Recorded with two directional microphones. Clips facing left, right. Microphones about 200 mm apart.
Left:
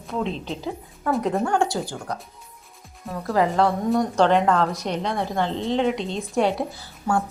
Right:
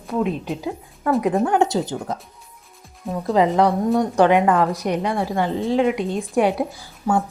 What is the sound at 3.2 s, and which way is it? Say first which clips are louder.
A woman's voice: right 3 dB; 20° right (ahead or behind).